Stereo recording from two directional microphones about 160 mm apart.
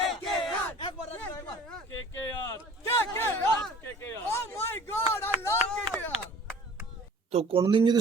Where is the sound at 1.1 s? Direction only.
15° left (ahead or behind).